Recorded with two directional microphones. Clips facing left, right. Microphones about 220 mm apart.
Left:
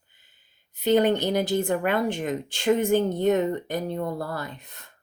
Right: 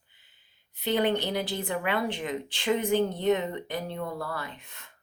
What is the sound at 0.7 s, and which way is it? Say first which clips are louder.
Speech: left 6 dB; 45° left (ahead or behind).